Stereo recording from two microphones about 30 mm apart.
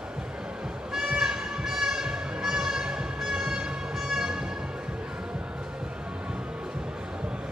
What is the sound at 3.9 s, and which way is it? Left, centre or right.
Music, centre.